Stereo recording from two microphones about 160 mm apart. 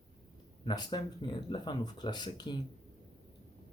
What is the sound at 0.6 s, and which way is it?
Speech, 30° left (ahead or behind).